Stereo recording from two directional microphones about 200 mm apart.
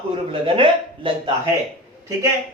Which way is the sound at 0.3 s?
25° right (ahead or behind).